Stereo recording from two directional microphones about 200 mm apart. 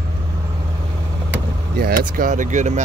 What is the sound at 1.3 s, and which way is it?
Speech, 45° right (ahead or behind).